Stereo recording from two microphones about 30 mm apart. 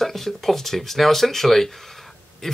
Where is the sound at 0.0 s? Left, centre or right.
Centre.